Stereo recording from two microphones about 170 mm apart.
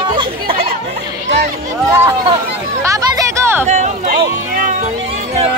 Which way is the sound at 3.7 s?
45° right (ahead or behind).